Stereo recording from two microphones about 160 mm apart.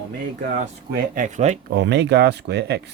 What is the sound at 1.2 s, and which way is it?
Speech, 50° right (ahead or behind).